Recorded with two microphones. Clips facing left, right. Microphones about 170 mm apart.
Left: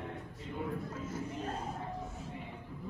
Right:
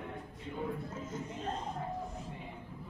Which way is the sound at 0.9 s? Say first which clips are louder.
Left 2 dB; 10° left (ahead or behind).